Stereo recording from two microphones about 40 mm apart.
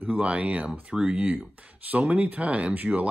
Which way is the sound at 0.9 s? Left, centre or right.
Right.